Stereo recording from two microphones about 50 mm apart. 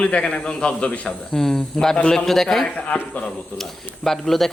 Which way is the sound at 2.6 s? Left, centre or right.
Left.